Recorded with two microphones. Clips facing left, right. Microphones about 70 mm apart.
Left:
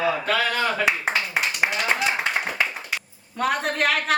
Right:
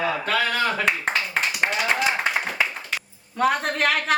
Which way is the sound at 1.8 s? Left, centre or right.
Centre.